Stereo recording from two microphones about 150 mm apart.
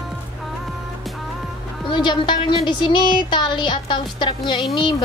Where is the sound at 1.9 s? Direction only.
30° left (ahead or behind).